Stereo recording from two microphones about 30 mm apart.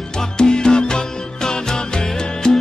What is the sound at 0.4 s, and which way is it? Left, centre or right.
Music, left.